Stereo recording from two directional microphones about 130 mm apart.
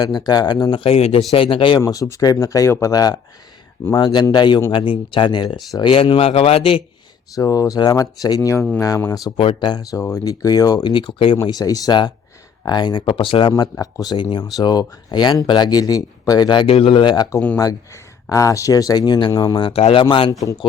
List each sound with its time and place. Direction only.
0.0 s speech: 30° left (ahead or behind)
1.8 s speech: 25° left (ahead or behind); by 6.8 s 45° left (ahead or behind)
7.3 s speech: 25° left (ahead or behind)
9.4 s speech: 40° left (ahead or behind)
11.4 s speech: 30° left (ahead or behind)
13.5 s speech: 25° left (ahead or behind)
18.3 s speech: 25° left (ahead or behind); by 20.3 s 40° left (ahead or behind)